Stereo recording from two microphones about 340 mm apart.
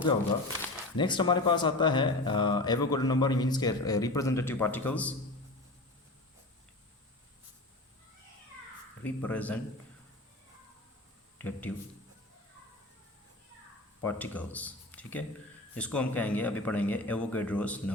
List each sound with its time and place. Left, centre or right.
0.9 s speech: centre
9.0 s speech: centre
11.3 s a man's voice: centre
14.0 s speech: centre